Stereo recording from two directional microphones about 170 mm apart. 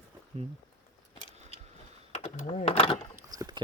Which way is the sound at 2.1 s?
40° left (ahead or behind).